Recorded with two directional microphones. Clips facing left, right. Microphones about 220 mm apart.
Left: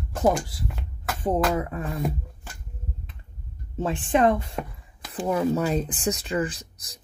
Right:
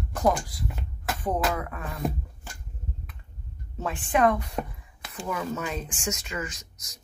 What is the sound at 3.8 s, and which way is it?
Speech, 25° left (ahead or behind).